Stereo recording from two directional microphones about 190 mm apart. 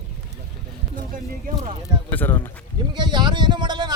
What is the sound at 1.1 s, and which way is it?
Speech, 45° right (ahead or behind).